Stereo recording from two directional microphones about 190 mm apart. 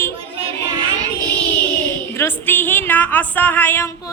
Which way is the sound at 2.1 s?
10° left (ahead or behind).